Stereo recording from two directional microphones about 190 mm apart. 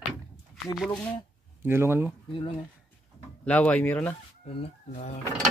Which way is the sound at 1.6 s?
10° right (ahead or behind).